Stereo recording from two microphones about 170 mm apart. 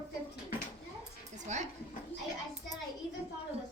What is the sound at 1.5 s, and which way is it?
Speech, 45° right (ahead or behind).